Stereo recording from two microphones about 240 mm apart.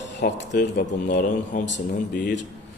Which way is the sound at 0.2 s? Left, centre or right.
Left.